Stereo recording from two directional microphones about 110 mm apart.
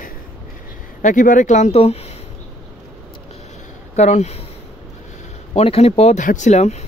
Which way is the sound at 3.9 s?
90° left.